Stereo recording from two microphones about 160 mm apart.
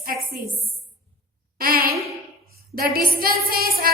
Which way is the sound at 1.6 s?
70° right (ahead or behind).